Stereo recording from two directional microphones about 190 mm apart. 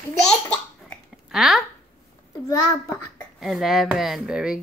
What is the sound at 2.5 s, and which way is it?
Speech, 15° left (ahead or behind).